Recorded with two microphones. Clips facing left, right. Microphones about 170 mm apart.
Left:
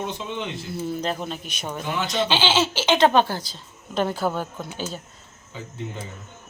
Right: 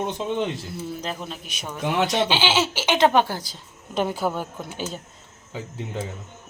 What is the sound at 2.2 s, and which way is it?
A woman's voice, 15° right (ahead or behind).